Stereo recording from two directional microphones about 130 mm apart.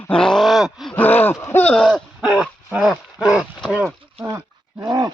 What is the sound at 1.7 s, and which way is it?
Speech, centre (ahead or behind).